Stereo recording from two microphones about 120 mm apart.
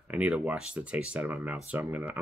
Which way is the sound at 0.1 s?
10° right (ahead or behind).